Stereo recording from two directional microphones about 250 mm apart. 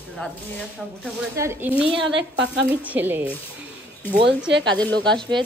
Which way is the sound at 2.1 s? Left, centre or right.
Right.